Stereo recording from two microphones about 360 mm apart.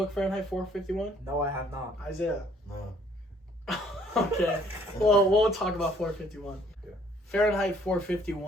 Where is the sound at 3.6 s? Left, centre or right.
Centre.